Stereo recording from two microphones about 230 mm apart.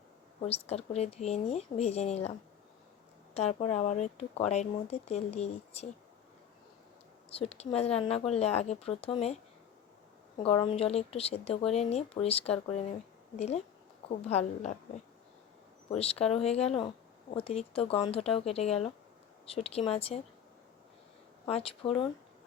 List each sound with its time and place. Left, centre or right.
0.4 s speech: left
3.3 s speech: left
7.3 s speech: left
15.9 s speech: left
21.4 s speech: left